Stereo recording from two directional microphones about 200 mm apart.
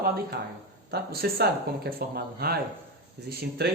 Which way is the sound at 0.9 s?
50° right (ahead or behind).